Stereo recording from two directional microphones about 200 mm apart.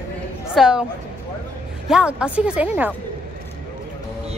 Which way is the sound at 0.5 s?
5° right (ahead or behind).